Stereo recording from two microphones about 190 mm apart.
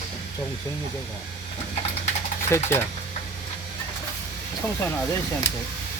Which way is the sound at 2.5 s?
15° left (ahead or behind).